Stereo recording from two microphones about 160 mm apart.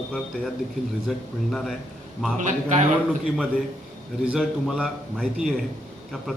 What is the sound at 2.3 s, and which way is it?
Speech, 45° right (ahead or behind).